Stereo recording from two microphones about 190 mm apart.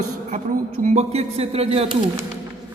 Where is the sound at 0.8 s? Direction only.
35° right (ahead or behind).